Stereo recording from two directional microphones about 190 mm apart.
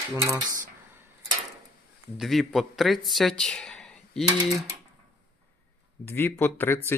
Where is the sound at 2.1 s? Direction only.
Centre (ahead or behind).